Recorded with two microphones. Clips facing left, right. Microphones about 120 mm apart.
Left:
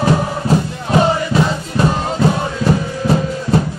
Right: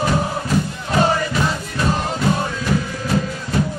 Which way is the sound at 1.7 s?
30° left (ahead or behind).